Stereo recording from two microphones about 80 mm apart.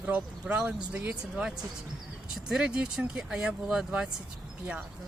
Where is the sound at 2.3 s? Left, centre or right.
Centre.